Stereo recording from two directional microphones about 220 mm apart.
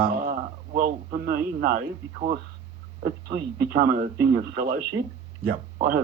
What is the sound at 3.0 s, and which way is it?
Speech, 40° right (ahead or behind).